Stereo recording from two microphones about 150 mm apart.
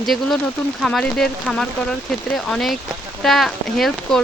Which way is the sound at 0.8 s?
5° left (ahead or behind).